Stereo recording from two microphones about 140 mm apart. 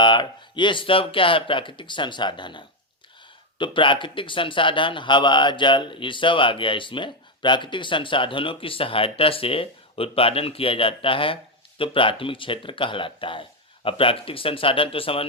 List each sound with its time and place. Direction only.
0.0 s speech: 35° left (ahead or behind)